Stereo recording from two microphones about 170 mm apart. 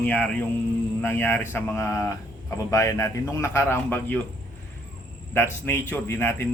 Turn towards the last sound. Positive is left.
turn(degrees=15)  # may be behind; listen again after turning